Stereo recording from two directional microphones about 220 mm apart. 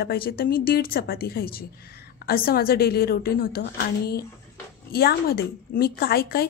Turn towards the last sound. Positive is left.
turn(degrees=45)  # may be behind; listen again after turning